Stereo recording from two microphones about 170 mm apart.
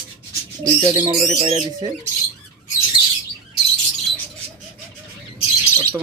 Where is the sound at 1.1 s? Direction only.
40° right (ahead or behind).